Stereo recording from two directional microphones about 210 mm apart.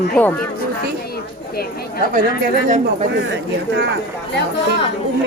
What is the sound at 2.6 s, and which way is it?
Speech, 35° right (ahead or behind).